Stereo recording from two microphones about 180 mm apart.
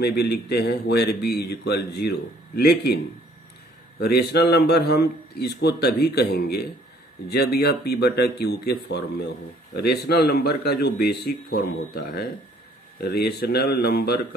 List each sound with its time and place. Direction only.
0.0 s speech: 60° left (ahead or behind)
4.0 s speech: 65° left (ahead or behind)